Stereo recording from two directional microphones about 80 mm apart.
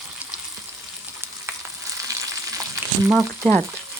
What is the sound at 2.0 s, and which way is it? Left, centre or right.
Frying, right.